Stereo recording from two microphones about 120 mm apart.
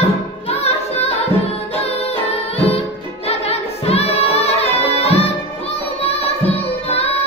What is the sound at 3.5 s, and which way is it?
Music, 60° left (ahead or behind).